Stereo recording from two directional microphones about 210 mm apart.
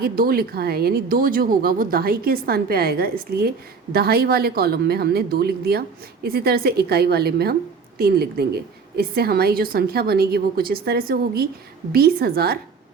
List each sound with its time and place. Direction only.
0.0 s a woman's voice: 45° right (ahead or behind)